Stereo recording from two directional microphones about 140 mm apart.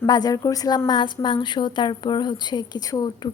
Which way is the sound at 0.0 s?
30° left (ahead or behind).